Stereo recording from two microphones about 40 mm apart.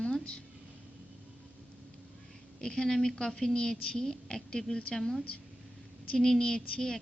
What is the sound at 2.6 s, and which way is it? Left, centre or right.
Speech, centre.